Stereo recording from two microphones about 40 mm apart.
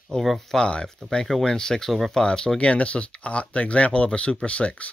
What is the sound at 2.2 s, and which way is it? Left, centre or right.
Speech, left.